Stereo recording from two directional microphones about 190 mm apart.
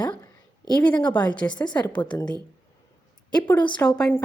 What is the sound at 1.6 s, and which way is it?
Speech, 20° left (ahead or behind).